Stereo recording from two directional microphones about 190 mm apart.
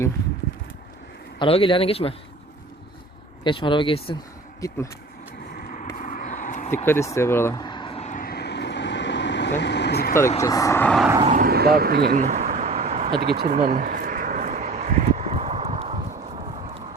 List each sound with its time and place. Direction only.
1.4 s speech: 30° left (ahead or behind)
3.4 s speech: 25° left (ahead or behind)
5.5 s a sound: 40° left (ahead or behind)
6.8 s speech: 15° left (ahead or behind)
7.6 s vehicle: 25° left (ahead or behind); by 10.2 s 55° left (ahead or behind)
10.4 s speech: 15° left (ahead or behind)
11.2 s speech: 40° right (ahead or behind)
12.1 s a sound: 40° right (ahead or behind)
13.2 s vehicle: 55° right (ahead or behind); by 16.4 s 35° right (ahead or behind)